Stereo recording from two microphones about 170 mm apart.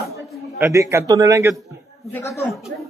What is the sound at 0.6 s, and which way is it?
Speech, 15° right (ahead or behind).